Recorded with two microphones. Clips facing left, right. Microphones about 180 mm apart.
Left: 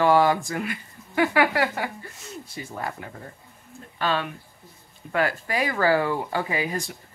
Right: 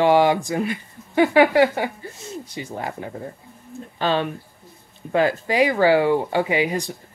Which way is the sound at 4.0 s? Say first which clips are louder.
Right 4 dB; 25° right (ahead or behind).